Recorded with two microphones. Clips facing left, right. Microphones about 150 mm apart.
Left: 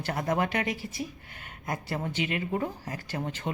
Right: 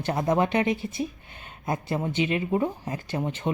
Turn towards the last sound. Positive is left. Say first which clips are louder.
# right 5 dB
turn(degrees=-20)  # may be behind; listen again after turning